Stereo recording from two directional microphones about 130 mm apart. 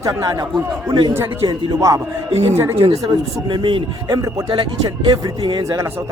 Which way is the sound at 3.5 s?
40° right (ahead or behind).